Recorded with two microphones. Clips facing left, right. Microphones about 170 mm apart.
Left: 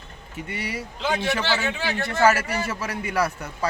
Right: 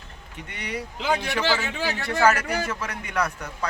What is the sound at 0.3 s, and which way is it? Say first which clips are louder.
Speech: left 2 dB; 5° left (ahead or behind).